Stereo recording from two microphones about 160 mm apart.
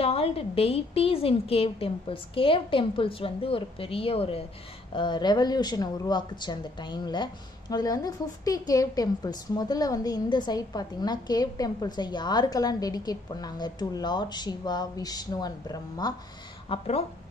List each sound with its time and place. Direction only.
0.0 s a woman's voice: 35° left (ahead or behind)
16.6 s speech: 35° left (ahead or behind)